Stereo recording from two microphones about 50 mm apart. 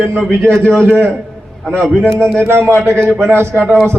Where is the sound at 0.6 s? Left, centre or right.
Left.